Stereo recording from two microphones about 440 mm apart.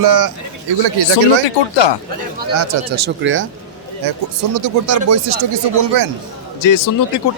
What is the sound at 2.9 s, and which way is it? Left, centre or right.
Speech, right.